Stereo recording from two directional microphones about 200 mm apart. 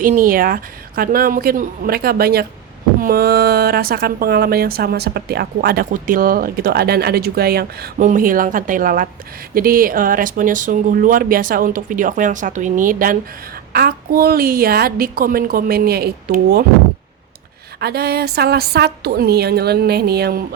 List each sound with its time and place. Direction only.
0.0 s a woman's voice: 40° right (ahead or behind)
17.7 s a woman's voice: 55° right (ahead or behind)